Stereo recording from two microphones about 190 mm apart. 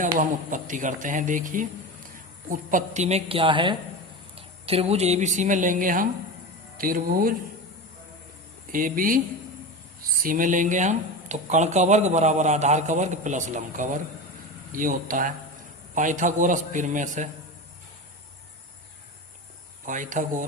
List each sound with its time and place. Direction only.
0.2 s speech: 40° right (ahead or behind)
8.7 s speech: 45° right (ahead or behind)
19.8 s speech: 40° right (ahead or behind)